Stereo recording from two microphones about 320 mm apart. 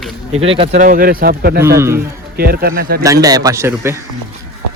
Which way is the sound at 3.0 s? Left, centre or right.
Centre.